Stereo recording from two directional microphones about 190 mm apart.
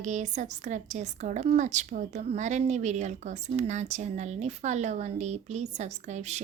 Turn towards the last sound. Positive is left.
turn(degrees=-35)  # may be behind; listen again after turning